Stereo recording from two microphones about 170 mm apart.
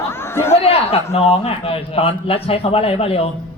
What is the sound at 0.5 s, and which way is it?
A man's voice, 35° left (ahead or behind).